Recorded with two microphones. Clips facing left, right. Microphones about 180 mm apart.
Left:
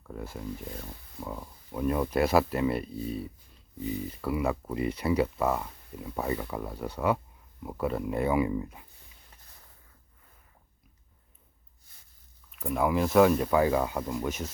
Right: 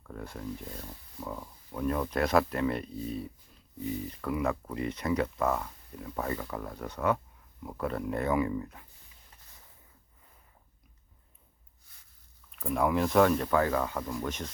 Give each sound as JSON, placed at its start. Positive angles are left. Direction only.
{"t": 0.1, "sound": "speech", "side_deg": 5}
{"t": 12.5, "sound": "speech", "side_deg": 0}